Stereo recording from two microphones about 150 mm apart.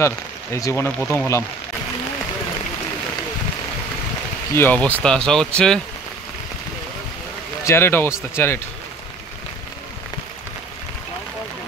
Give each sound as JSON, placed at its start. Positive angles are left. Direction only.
{"t": 0.0, "sound": "speech", "side_deg": 20}
{"t": 4.6, "sound": "speech", "side_deg": 10}
{"t": 7.6, "sound": "speech", "side_deg": 15}